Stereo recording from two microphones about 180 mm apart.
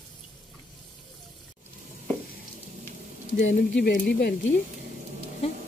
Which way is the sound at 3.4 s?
80° left.